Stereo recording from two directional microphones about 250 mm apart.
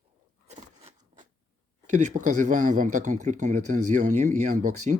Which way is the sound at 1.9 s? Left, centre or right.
Right.